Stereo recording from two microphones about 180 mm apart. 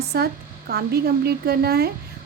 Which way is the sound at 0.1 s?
60° right (ahead or behind).